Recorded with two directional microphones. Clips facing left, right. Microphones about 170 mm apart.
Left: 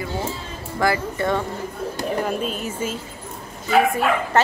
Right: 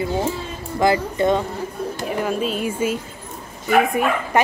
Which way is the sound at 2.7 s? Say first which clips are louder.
Right 5 dB; 10° right (ahead or behind).